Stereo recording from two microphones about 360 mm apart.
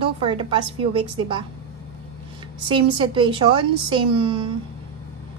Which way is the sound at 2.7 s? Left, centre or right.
Centre.